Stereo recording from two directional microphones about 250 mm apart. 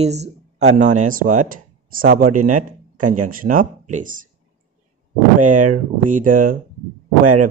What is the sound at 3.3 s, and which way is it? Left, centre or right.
Speech, right.